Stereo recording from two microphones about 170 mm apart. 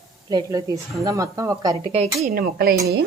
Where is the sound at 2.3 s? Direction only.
60° right (ahead or behind).